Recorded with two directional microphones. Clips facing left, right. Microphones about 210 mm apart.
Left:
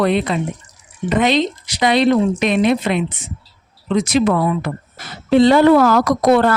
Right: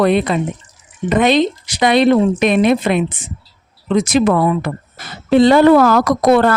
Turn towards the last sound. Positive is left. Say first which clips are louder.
# right 1 dB
turn(degrees=-55)  # may be behind; listen again after turning